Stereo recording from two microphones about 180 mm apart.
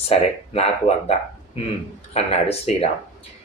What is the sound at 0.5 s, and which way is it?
Speech, 35° left (ahead or behind).